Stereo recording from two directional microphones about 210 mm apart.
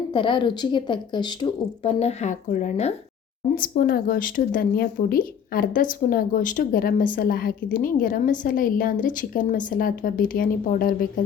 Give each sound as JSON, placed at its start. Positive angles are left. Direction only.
{"t": 0.1, "sound": "speech", "side_deg": 25}
{"t": 3.5, "sound": "speech", "side_deg": 45}